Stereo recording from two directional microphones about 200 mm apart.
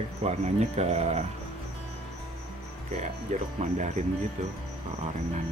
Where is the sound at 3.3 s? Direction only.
35° right (ahead or behind).